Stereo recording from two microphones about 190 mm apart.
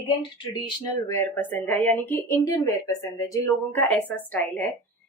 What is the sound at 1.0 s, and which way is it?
Speech, 15° left (ahead or behind).